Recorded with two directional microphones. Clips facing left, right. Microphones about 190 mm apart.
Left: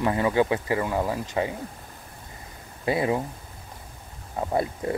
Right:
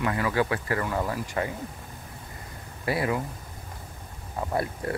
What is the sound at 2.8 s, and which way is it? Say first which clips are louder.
Speech: left 3 dB; 20° left (ahead or behind).